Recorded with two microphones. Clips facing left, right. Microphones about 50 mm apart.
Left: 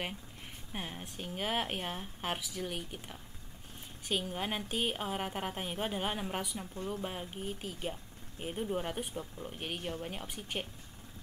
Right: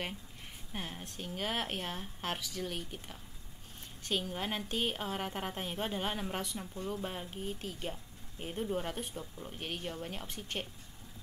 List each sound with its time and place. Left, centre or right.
0.7 s a woman's voice: centre